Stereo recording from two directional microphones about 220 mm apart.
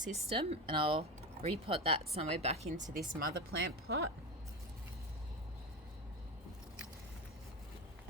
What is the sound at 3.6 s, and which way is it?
Speech, 50° right (ahead or behind).